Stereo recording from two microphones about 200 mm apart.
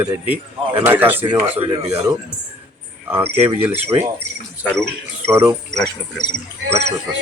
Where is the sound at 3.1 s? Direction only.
10° right (ahead or behind).